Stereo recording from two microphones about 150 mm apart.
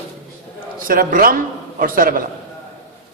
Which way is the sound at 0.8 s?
70° right (ahead or behind).